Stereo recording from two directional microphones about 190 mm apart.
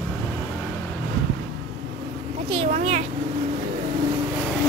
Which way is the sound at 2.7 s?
35° right (ahead or behind).